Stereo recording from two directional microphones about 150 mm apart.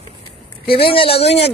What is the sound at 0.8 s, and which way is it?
Speech, 35° left (ahead or behind).